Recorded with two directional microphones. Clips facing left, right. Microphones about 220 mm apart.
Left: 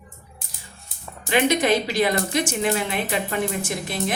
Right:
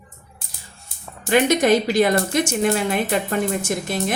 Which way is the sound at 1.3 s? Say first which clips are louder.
Right 3 dB; 45° right (ahead or behind).